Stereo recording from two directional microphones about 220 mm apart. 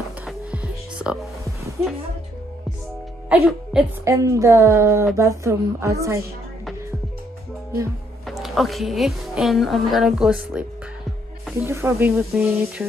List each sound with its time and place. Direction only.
0.2 s music: 5° right (ahead or behind)
3.3 s speech: 5° right (ahead or behind)
8.3 s a woman's voice: centre (ahead or behind)
11.6 s speech: 10° right (ahead or behind)